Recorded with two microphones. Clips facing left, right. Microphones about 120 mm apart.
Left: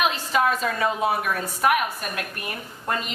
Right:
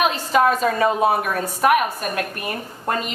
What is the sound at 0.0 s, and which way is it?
A woman's voice, 40° right (ahead or behind).